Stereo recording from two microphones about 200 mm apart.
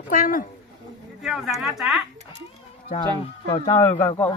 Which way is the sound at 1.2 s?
5° right (ahead or behind).